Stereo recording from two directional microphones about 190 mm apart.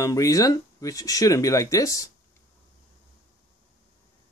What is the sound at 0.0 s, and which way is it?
Speech, 15° left (ahead or behind).